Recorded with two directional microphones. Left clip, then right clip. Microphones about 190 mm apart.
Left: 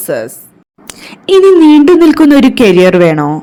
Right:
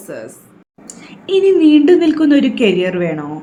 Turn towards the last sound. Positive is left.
turn(degrees=40)  # may be behind; listen again after turning